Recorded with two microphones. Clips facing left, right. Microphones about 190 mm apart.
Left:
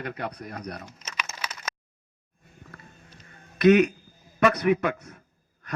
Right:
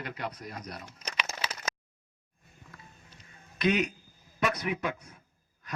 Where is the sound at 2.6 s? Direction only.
60° left (ahead or behind).